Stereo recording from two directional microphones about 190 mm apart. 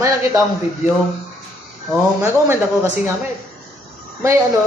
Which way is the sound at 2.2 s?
15° right (ahead or behind).